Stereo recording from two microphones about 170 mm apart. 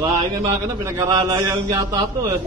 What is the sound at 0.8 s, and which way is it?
A man's voice, 20° right (ahead or behind).